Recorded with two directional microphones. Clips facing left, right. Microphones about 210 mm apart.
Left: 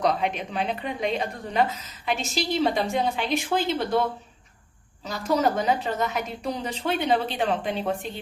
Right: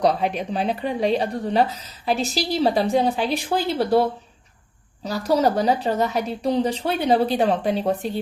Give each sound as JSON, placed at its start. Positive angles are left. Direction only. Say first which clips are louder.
{"t": 0.0, "sound": "a woman's voice", "louder": "right 4 dB", "side_deg": -35}
{"t": 5.0, "sound": "a woman's voice", "louder": "right 4 dB", "side_deg": -35}